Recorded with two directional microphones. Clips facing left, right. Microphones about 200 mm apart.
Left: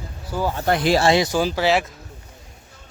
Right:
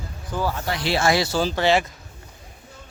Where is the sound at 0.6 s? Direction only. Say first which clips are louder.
Left 7 dB; 50° left (ahead or behind).